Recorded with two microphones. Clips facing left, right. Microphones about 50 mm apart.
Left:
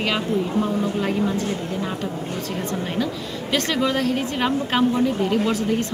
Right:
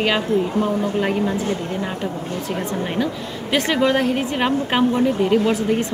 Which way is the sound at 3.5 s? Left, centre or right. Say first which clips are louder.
Right 4 dB; centre.